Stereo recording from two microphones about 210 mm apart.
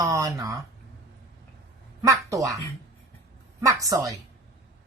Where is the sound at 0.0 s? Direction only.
15° right (ahead or behind).